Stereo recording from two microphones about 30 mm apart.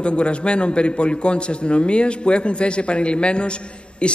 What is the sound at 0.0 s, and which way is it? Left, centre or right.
A man's voice, left.